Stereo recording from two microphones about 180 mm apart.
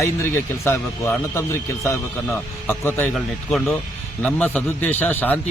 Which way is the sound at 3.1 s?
Centre (ahead or behind).